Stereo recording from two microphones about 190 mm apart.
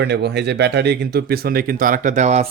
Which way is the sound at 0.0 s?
60° right (ahead or behind).